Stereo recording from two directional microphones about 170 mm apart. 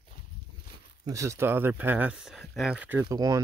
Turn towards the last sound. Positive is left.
turn(degrees=-20)  # may be behind; listen again after turning